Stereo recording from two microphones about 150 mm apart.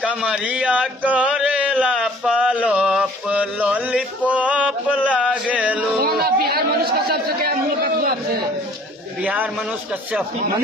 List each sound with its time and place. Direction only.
0.0 s a sound: 5° right (ahead or behind)
5.9 s chatter: 90° right
9.2 s a man's voice: 10° right (ahead or behind)